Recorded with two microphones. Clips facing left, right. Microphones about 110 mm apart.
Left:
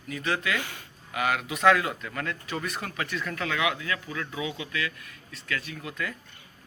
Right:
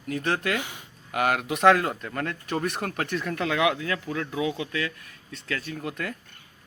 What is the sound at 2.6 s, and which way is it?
Speech, 60° right (ahead or behind).